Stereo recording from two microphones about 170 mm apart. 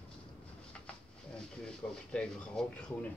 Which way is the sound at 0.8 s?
5° left (ahead or behind).